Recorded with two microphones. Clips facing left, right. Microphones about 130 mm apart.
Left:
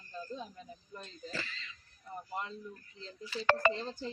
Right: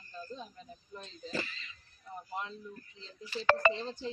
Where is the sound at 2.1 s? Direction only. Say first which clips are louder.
Even; centre (ahead or behind).